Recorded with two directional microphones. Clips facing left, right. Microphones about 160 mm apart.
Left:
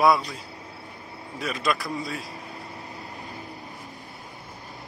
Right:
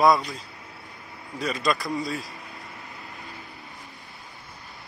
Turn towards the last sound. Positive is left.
turn(degrees=40)  # may be behind; listen again after turning